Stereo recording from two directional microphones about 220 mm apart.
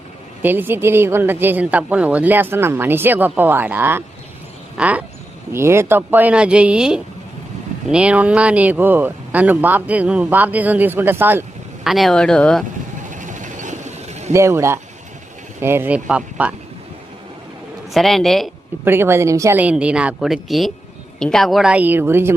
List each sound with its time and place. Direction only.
0.4 s speech: 10° right (ahead or behind)
13.0 s vehicle: 35° right (ahead or behind)
14.3 s speech: 15° right (ahead or behind)
17.9 s speech: centre (ahead or behind)
18.9 s speech: 10° right (ahead or behind)